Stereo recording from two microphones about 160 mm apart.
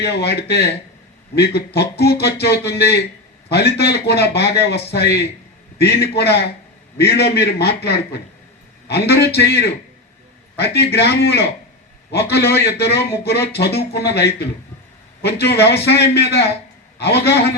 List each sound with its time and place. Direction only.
0.0 s speech: 90° left